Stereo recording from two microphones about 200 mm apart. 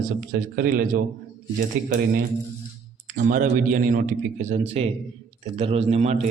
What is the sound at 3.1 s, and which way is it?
A man's voice, 45° right (ahead or behind).